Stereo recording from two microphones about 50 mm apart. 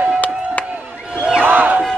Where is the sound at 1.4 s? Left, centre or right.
Right.